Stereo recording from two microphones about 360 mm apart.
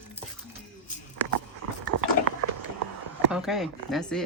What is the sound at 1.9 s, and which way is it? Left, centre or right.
Biting, right.